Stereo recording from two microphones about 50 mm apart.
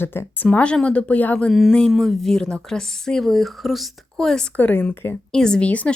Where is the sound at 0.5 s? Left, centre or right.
Left.